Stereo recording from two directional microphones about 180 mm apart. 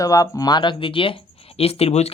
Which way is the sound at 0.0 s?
20° left (ahead or behind).